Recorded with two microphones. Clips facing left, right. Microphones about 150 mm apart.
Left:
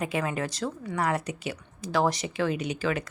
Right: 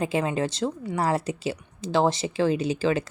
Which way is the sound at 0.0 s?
25° right (ahead or behind).